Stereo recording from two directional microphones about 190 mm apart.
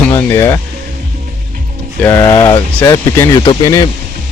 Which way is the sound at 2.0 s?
15° left (ahead or behind).